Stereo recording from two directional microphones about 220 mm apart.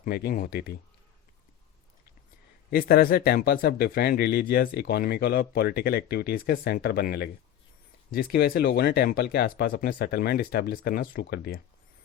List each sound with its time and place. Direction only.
0.0 s speech: 45° left (ahead or behind)
2.6 s speech: 40° left (ahead or behind)